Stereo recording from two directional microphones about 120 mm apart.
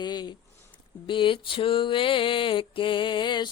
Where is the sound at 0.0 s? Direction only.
35° left (ahead or behind).